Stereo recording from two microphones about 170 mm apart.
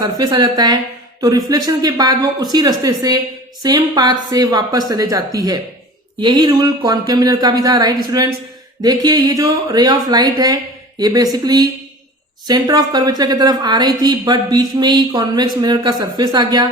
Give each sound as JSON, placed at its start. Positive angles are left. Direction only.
{"t": 0.0, "sound": "a woman's voice", "side_deg": -20}